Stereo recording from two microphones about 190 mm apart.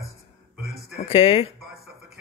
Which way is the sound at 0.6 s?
55° right (ahead or behind).